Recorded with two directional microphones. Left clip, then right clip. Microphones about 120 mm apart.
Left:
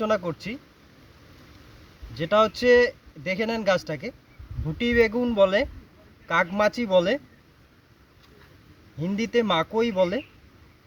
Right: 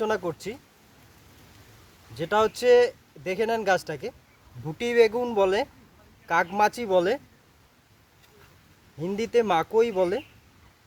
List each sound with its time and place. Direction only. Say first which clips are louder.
0.0 s speech: left 2 dB; 40° right (ahead or behind)
2.1 s speech: left 3 dB; 40° right (ahead or behind)
9.0 s speech: right 1 dB; 40° right (ahead or behind)